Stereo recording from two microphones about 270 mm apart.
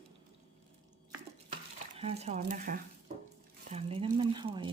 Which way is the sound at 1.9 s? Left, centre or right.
Right.